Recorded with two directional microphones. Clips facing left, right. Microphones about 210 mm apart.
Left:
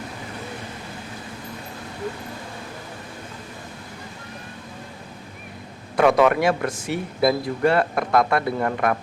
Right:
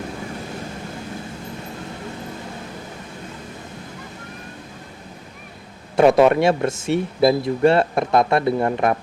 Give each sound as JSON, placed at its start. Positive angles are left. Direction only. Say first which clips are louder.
{"t": 6.0, "sound": "speech", "louder": "right 3 dB", "side_deg": -25}